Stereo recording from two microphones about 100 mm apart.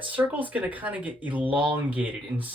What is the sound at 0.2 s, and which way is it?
Speech, 15° right (ahead or behind).